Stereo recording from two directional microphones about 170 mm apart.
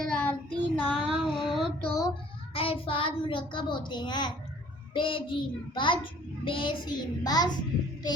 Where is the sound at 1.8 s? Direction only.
20° left (ahead or behind).